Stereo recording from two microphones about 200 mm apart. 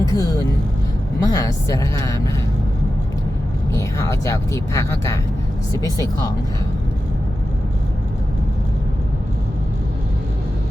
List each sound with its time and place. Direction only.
0.0 s speech: 20° left (ahead or behind)
3.8 s speech: 15° left (ahead or behind)